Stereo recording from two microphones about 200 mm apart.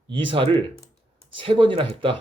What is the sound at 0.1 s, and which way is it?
Speech, 25° right (ahead or behind).